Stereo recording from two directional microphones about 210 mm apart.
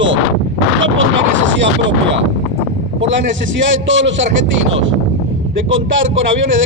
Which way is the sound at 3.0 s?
60° right (ahead or behind).